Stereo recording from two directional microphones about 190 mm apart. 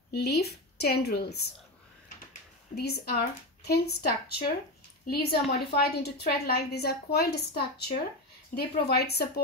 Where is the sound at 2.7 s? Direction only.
60° left (ahead or behind).